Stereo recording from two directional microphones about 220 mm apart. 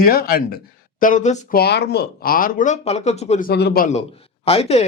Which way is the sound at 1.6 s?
45° left (ahead or behind).